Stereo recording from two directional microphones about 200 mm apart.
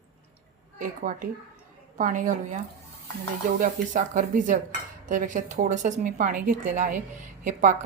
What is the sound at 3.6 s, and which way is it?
A woman's voice, 40° right (ahead or behind).